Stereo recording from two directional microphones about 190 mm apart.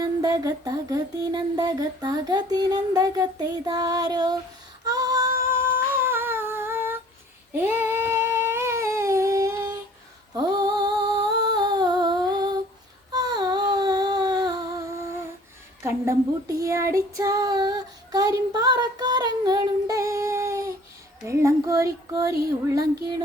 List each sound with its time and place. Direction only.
0.0 s music: 20° right (ahead or behind)
4.9 s humming: 20° right (ahead or behind)
7.5 s a sound: 10° right (ahead or behind)
10.3 s humming: 20° right (ahead or behind)
13.1 s a sound: 20° right (ahead or behind)
15.8 s child singing: 15° right (ahead or behind)